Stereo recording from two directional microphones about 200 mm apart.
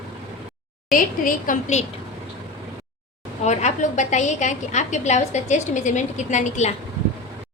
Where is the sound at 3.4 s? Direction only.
35° left (ahead or behind).